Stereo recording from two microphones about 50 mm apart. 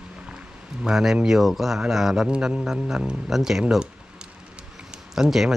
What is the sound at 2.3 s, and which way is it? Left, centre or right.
Speech, centre.